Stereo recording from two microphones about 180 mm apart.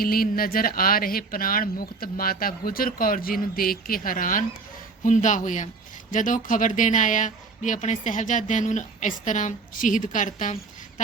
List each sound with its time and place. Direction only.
0.0 s speech: 55° left (ahead or behind)